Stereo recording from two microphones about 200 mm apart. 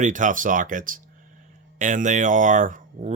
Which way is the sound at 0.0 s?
40° right (ahead or behind).